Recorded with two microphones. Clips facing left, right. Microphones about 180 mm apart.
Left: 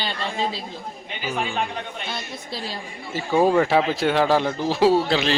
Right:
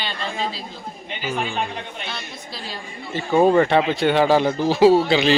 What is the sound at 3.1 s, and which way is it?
Speech, 5° left (ahead or behind).